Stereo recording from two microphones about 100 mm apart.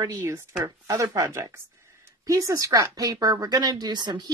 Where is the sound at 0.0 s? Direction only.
30° right (ahead or behind).